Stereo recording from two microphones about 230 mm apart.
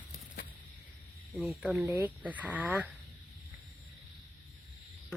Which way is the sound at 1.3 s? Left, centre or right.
Centre.